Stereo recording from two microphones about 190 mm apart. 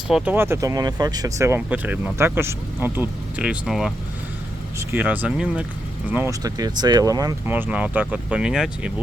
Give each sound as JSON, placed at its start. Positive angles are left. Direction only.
{"t": 0.1, "sound": "speech", "side_deg": -5}
{"t": 4.8, "sound": "speech", "side_deg": -10}